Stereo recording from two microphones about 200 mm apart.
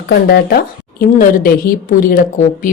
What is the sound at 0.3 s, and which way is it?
A woman's voice, 50° left (ahead or behind).